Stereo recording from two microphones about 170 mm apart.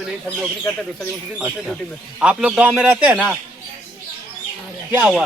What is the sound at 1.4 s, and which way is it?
Speech, 10° right (ahead or behind).